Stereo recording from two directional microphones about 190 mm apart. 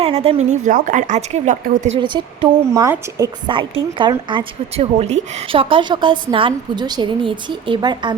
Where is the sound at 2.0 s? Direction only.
25° right (ahead or behind).